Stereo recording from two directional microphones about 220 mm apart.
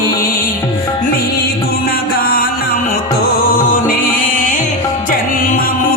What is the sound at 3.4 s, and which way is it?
Music, 40° left (ahead or behind).